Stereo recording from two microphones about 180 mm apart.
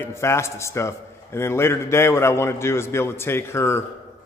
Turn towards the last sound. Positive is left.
turn(degrees=15)  # may be behind; listen again after turning